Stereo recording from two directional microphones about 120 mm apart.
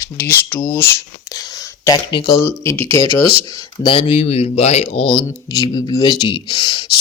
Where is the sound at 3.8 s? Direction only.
45° left (ahead or behind); by 5.0 s 65° left (ahead or behind).